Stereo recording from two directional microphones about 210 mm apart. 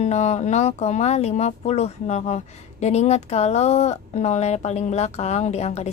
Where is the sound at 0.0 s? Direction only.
30° left (ahead or behind).